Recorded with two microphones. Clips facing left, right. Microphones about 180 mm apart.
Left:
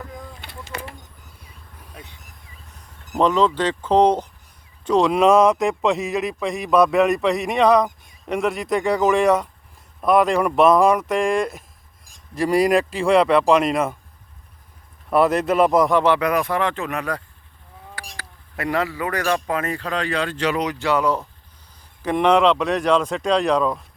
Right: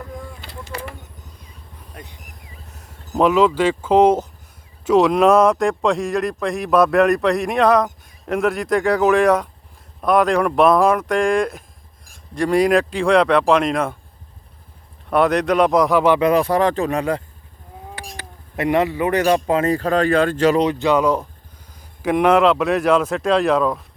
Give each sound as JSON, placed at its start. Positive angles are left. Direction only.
{"t": 0.7, "sound": "vehicle", "side_deg": -30}
{"t": 3.2, "sound": "speech", "side_deg": -5}
{"t": 15.1, "sound": "speech", "side_deg": 5}
{"t": 16.0, "sound": "speech", "side_deg": -20}
{"t": 19.7, "sound": "speech", "side_deg": -45}
{"t": 20.7, "sound": "speech", "side_deg": -15}
{"t": 22.0, "sound": "speech", "side_deg": -5}